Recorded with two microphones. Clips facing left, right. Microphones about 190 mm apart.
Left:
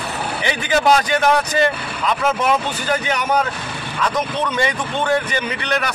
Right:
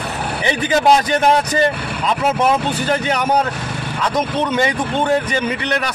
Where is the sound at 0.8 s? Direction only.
25° right (ahead or behind).